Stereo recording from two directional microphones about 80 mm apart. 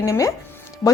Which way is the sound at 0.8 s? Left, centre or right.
Left.